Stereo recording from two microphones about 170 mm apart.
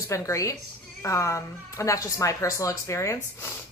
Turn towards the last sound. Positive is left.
turn(degrees=15)  # may be behind; listen again after turning